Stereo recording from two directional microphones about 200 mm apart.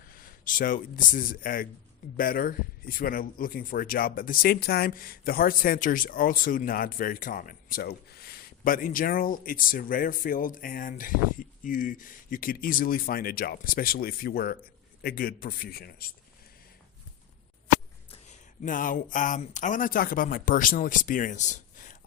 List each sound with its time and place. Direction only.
0.2 s speech: 45° left (ahead or behind)
18.1 s a sound: 40° left (ahead or behind)
19.1 s speech: 40° left (ahead or behind)